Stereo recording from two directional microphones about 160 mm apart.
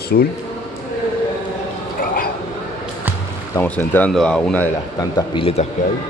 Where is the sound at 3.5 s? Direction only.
10° left (ahead or behind).